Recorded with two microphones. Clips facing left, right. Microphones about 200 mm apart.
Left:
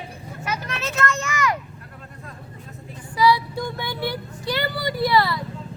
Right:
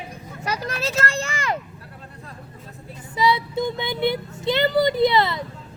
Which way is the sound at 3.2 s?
20° right (ahead or behind).